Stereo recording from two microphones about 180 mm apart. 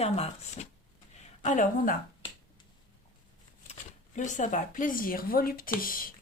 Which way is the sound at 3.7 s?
45° left (ahead or behind).